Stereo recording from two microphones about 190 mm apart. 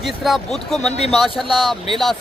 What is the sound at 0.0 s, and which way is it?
Speech, centre (ahead or behind).